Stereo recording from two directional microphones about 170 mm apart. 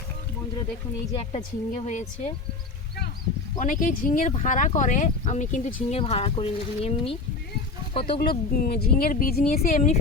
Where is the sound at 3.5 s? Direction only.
50° left (ahead or behind).